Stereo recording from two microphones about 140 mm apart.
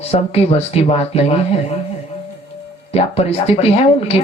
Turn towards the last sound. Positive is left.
turn(degrees=45)  # may be behind; listen again after turning